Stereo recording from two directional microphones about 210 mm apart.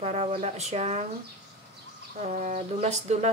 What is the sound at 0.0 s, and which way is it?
Speech, 30° right (ahead or behind).